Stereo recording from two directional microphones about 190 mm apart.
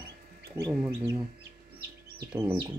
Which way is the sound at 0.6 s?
15° right (ahead or behind).